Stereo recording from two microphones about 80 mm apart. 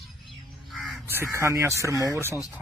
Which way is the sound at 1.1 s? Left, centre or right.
Right.